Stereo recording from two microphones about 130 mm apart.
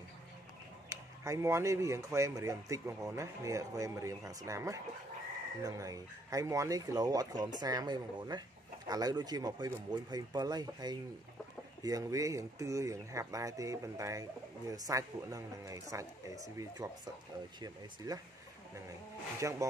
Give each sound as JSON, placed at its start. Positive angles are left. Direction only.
{"t": 0.8, "sound": "speech", "side_deg": -25}
{"t": 19.4, "sound": "speech", "side_deg": -20}